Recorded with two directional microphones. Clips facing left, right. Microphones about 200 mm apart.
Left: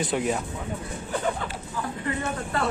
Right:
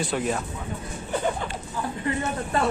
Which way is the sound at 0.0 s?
20° left (ahead or behind).